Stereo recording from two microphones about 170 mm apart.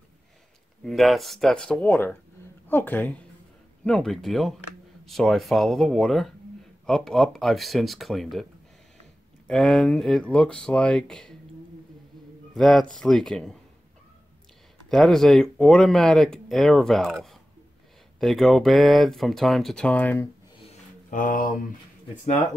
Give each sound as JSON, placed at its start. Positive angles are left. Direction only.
{"t": 0.8, "sound": "a woman's voice", "side_deg": 0}
{"t": 9.5, "sound": "speech", "side_deg": 5}
{"t": 12.5, "sound": "speech", "side_deg": 0}
{"t": 14.9, "sound": "speech", "side_deg": 0}
{"t": 21.1, "sound": "mantra", "side_deg": 50}